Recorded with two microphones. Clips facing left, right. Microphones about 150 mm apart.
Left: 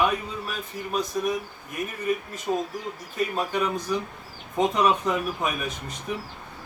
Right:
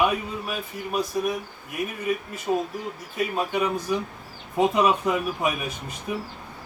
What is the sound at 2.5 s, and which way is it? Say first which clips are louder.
Speech: right 2 dB; 10° right (ahead or behind).